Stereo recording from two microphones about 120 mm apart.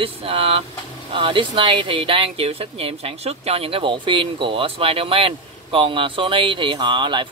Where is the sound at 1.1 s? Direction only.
45° right (ahead or behind).